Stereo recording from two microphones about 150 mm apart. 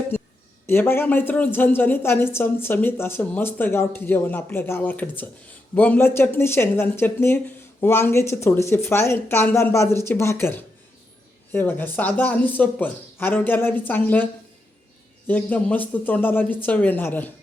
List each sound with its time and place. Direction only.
0.7 s speech: 15° left (ahead or behind)
15.3 s speech: 10° left (ahead or behind)